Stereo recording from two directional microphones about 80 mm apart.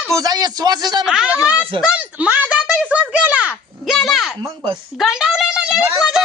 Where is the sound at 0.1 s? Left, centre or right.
Right.